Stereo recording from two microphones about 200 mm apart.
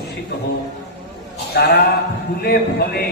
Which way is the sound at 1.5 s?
50° left (ahead or behind).